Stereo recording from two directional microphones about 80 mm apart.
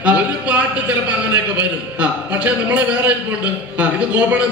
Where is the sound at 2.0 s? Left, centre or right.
Centre.